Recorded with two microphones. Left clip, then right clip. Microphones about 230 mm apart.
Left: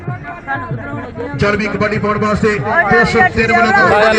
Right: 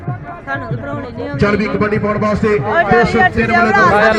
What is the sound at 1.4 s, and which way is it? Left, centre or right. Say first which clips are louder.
A man's voice: even; left.